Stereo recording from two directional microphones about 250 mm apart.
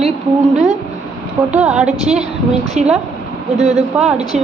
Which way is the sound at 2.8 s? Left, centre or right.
Right.